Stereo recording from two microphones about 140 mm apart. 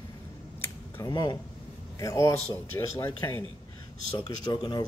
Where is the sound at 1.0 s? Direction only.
30° left (ahead or behind).